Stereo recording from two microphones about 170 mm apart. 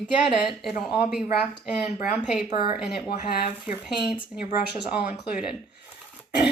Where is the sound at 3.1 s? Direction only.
65° left (ahead or behind).